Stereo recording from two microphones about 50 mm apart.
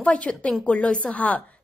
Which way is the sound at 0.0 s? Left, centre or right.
Left.